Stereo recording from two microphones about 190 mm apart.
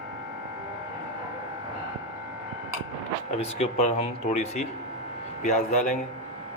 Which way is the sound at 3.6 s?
35° left (ahead or behind).